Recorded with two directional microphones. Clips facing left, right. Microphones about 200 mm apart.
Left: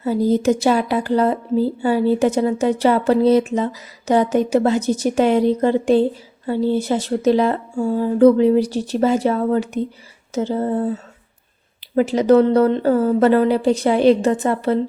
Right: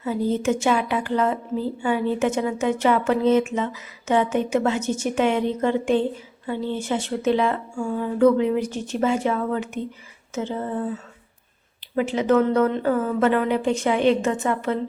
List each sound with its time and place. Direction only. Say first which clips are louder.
0.0 s speech: left 6 dB; 35° left (ahead or behind)